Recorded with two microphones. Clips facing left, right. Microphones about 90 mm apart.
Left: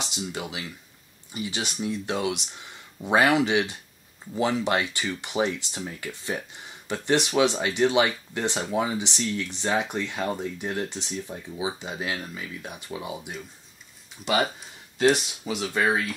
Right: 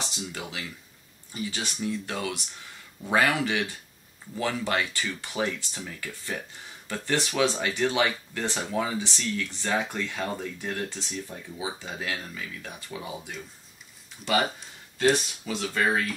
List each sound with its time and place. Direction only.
0.1 s speech: 20° left (ahead or behind)
15.1 s speech: 15° left (ahead or behind)